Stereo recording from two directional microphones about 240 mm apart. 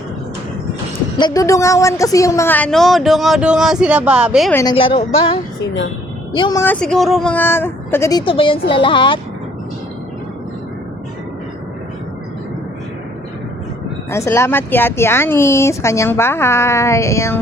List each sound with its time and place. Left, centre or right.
1.2 s speech: centre
4.5 s speech: centre
14.1 s speech: centre